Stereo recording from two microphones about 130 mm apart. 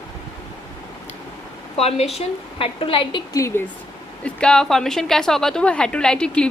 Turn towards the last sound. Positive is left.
turn(degrees=5)  # may be behind; listen again after turning